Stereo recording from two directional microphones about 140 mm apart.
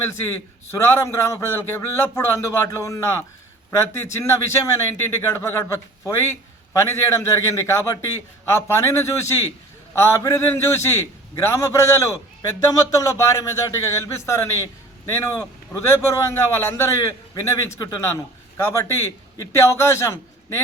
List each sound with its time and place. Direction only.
0.7 s a man's voice: 20° left (ahead or behind)